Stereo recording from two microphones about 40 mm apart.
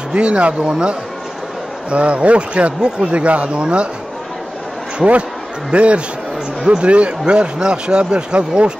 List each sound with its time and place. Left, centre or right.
0.1 s a man's voice: right
4.9 s a man's voice: right